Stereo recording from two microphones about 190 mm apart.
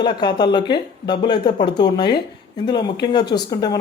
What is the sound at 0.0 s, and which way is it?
Speech, 20° left (ahead or behind).